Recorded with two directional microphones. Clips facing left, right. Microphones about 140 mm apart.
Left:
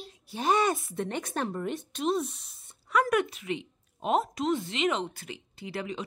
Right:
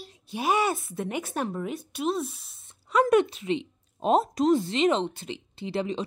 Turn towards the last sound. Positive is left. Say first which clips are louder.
# right 6 dB
turn(degrees=-30)  # may be behind; listen again after turning